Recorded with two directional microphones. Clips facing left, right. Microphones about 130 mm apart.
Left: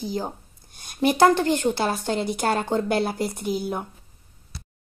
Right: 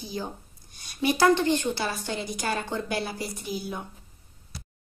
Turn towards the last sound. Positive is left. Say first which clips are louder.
# left 7 dB
turn(degrees=55)  # may be behind; listen again after turning